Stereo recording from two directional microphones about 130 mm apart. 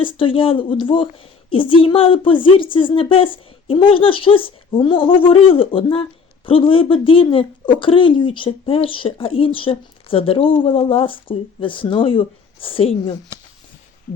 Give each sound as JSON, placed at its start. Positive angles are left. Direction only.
{"t": 0.0, "sound": "a woman's voice", "side_deg": 40}